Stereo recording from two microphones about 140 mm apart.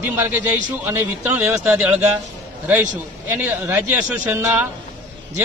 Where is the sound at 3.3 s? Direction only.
15° right (ahead or behind).